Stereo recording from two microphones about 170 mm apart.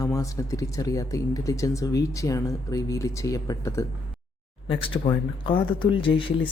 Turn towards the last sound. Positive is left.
turn(degrees=30)  # may be behind; listen again after turning